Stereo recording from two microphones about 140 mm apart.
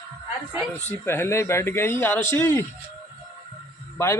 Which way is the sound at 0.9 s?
15° left (ahead or behind).